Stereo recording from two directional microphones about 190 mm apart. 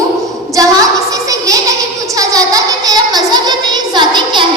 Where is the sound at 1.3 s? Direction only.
15° right (ahead or behind).